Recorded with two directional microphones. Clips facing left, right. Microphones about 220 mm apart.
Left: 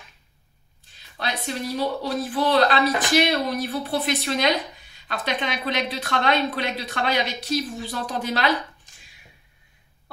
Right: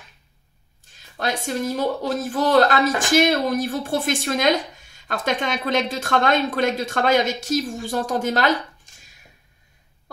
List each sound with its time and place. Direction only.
0.9 s speech: 45° right (ahead or behind)